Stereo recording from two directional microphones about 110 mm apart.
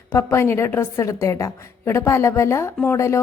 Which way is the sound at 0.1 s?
25° left (ahead or behind).